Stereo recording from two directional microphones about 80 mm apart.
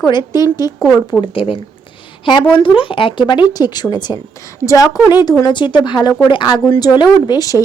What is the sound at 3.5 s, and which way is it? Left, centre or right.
Speech, left.